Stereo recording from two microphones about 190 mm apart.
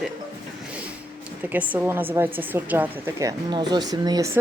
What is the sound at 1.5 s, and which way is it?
A woman's voice, 10° right (ahead or behind).